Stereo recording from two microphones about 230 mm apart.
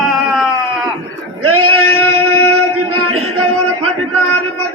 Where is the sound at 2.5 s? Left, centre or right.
Right.